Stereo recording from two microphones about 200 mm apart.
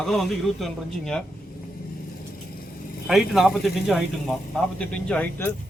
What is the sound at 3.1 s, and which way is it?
A man's voice, centre (ahead or behind).